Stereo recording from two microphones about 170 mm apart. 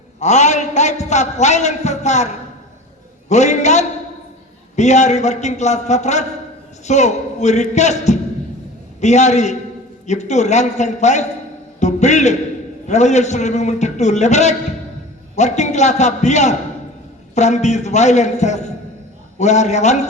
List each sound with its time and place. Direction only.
0.2 s a man's voice: 40° left (ahead or behind)